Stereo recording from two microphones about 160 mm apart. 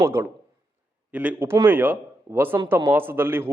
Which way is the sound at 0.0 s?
15° right (ahead or behind).